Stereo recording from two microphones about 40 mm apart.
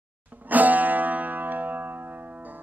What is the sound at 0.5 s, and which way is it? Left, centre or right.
Music, right.